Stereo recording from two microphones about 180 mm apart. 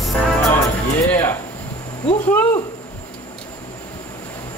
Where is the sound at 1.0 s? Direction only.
10° left (ahead or behind).